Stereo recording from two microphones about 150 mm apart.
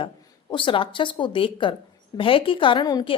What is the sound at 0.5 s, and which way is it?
Speech, 35° left (ahead or behind).